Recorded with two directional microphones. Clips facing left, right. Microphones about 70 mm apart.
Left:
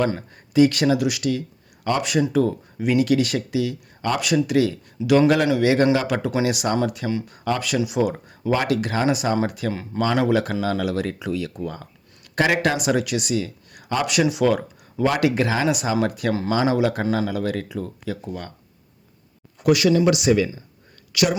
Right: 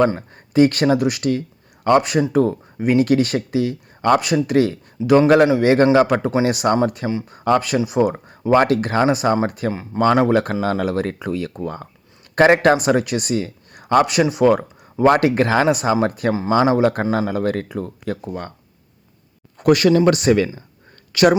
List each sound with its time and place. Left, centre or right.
0.0 s speech: right
7.1 s speech: right
7.3 s speech: right
18.3 s speech: right
19.5 s speech: right
21.1 s speech: right